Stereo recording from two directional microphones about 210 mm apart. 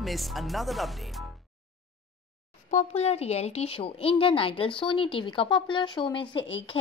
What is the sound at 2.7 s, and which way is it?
Speech, 30° left (ahead or behind).